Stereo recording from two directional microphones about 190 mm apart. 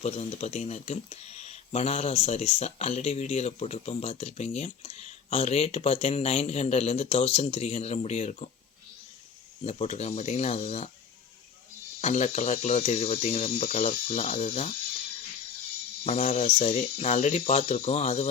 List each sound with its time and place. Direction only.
0.0 s speech: 35° left (ahead or behind)
9.6 s speech: 35° left (ahead or behind)
11.9 s speech: 35° left (ahead or behind)
16.0 s speech: 35° left (ahead or behind)